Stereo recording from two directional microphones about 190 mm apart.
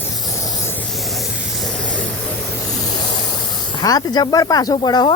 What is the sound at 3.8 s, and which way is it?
Speech, 20° left (ahead or behind).